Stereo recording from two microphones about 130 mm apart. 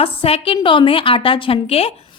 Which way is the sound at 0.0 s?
45° left (ahead or behind).